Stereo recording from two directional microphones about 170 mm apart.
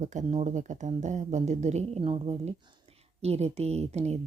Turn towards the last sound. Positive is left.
turn(degrees=-40)  # may be behind; listen again after turning